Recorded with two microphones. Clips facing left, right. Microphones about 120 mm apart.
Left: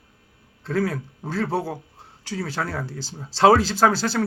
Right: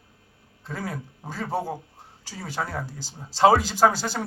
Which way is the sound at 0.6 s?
15° right (ahead or behind).